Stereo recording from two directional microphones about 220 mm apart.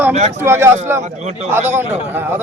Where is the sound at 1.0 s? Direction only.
30° right (ahead or behind).